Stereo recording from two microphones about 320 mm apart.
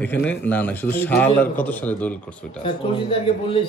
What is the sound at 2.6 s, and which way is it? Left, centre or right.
Speech, centre.